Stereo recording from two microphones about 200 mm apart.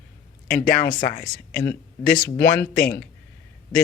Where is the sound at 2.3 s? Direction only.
50° left (ahead or behind).